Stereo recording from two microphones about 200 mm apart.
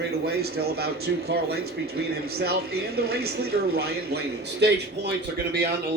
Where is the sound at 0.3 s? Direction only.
50° right (ahead or behind).